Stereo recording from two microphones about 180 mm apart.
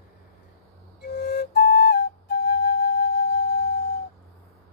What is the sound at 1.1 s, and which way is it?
Flute, 65° left (ahead or behind).